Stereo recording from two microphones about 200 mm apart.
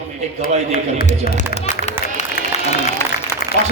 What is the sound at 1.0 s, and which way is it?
Speech, 50° left (ahead or behind).